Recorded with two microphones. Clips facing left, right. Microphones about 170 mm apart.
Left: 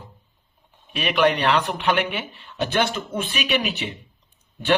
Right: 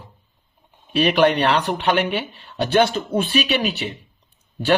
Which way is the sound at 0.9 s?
35° right (ahead or behind).